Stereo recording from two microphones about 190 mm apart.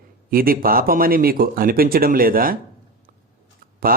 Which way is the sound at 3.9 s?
50° right (ahead or behind).